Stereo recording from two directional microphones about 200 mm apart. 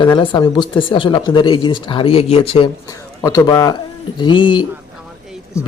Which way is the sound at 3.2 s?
15° left (ahead or behind).